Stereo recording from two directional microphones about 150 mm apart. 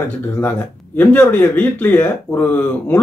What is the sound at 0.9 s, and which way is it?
Speech, 15° left (ahead or behind).